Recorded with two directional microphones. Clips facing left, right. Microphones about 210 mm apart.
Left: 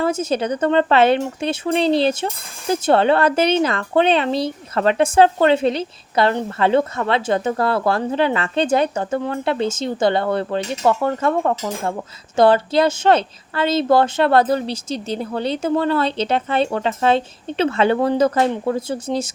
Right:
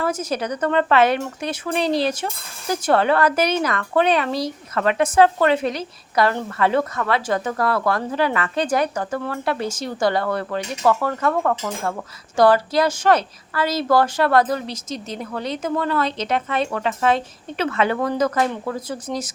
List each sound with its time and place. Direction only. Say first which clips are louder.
0.0 s speech: left 4 dB; 25° left (ahead or behind)